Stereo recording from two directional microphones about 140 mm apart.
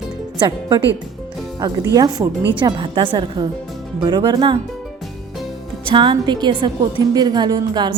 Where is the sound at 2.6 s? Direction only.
35° right (ahead or behind).